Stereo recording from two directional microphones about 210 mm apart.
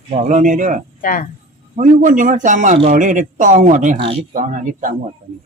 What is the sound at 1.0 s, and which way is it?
Speech, 40° left (ahead or behind).